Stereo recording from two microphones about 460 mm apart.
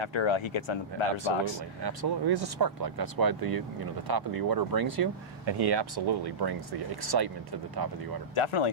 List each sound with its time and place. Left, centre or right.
0.0 s speech: left
1.8 s speech: right
8.4 s speech: left